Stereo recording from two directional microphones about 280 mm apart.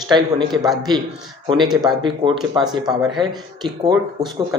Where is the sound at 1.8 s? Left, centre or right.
Centre.